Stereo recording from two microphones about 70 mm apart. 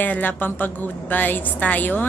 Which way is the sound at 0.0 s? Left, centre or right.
Left.